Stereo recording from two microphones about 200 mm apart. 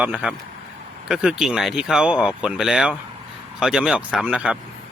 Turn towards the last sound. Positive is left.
turn(degrees=-5)  # may be behind; listen again after turning